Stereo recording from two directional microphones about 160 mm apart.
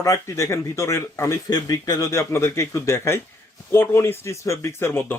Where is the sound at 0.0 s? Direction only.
20° left (ahead or behind).